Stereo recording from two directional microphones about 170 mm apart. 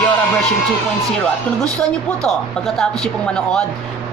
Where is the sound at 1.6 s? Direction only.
5° left (ahead or behind).